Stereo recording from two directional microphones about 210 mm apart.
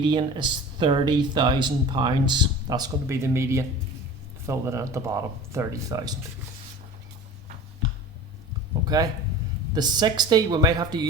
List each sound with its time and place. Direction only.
0.0 s speech: 25° right (ahead or behind)
8.8 s speech: 20° right (ahead or behind)